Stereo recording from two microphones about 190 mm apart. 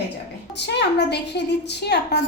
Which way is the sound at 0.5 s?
65° left (ahead or behind).